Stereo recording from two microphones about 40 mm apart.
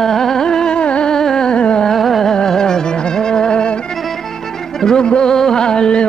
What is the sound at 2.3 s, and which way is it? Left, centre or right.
Music, centre.